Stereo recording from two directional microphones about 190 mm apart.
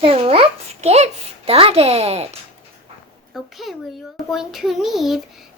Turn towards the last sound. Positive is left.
turn(degrees=0)  # may be behind; listen again after turning